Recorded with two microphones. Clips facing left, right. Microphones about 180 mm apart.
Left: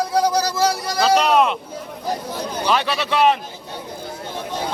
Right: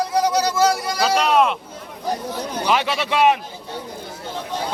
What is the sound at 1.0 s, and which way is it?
Speech, centre (ahead or behind).